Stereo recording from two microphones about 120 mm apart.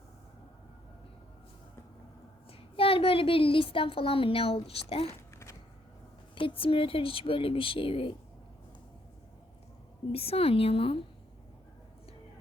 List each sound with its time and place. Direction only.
2.5 s a woman's voice: 50° left (ahead or behind)
6.3 s speech: 45° left (ahead or behind)
10.1 s speech: 55° left (ahead or behind)